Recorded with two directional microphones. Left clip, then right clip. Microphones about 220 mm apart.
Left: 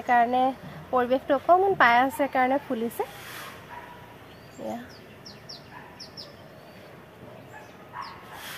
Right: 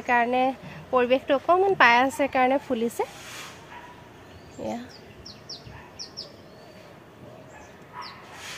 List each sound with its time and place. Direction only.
0.0 s speech: 30° right (ahead or behind)